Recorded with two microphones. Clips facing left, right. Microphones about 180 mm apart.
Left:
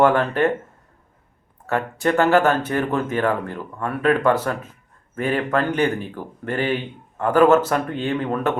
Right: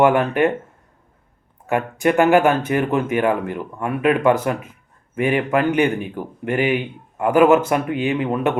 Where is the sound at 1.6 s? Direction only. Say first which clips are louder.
Right 3 dB; 15° right (ahead or behind).